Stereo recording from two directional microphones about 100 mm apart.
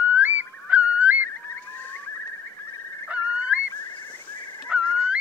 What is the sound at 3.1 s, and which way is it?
Goose, 15° right (ahead or behind).